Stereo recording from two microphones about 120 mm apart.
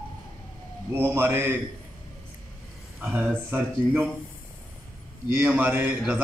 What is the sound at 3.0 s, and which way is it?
A man's voice, 15° right (ahead or behind).